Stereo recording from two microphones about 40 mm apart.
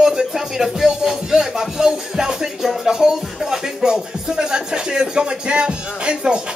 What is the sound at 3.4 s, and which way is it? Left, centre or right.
Speech, centre.